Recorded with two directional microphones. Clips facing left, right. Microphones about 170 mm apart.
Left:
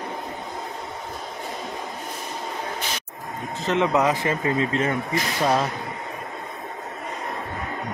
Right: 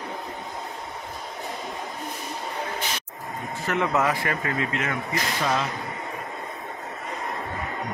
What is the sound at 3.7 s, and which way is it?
A man's voice, 20° left (ahead or behind).